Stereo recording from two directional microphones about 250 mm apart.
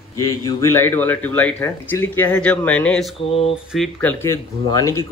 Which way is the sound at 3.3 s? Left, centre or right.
Left.